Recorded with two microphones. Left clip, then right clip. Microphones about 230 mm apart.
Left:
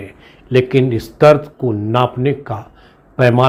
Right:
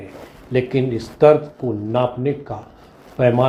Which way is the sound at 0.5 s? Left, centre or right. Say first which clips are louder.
Left 6 dB; left.